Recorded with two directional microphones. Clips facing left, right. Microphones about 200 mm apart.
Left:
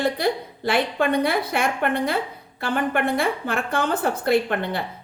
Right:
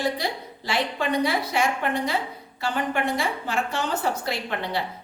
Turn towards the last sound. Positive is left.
turn(degrees=55)  # may be behind; listen again after turning